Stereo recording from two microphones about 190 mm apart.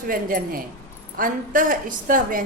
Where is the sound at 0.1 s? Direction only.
50° right (ahead or behind).